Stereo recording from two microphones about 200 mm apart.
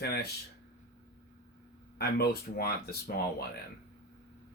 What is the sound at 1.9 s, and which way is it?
Speech, 50° left (ahead or behind).